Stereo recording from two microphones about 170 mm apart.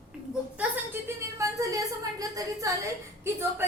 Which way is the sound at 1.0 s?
20° right (ahead or behind).